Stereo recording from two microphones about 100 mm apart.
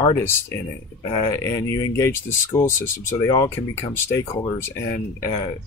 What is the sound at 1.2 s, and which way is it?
Speech, 30° left (ahead or behind).